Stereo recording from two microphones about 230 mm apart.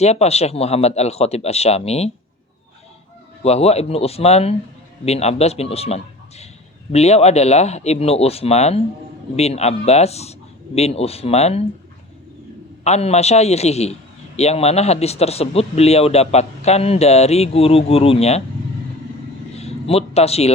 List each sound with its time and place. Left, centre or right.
0.0 s a man's voice: left
3.4 s a man's voice: left
12.8 s a man's voice: left
19.5 s a man's voice: left